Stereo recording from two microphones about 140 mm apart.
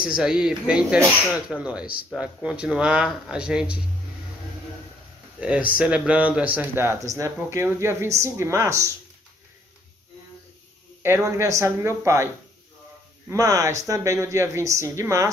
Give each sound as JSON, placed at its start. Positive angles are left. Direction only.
{"t": 0.0, "sound": "speech", "side_deg": -5}
{"t": 5.4, "sound": "speech", "side_deg": -10}
{"t": 11.0, "sound": "speech", "side_deg": -15}
{"t": 13.3, "sound": "speech", "side_deg": -20}